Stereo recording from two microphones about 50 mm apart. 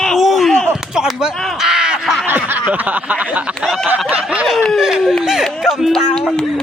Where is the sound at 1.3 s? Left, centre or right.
Centre.